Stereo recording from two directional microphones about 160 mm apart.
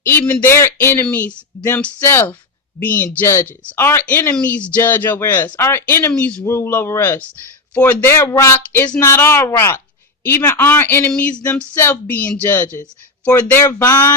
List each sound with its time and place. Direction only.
0.0 s speech: 15° left (ahead or behind)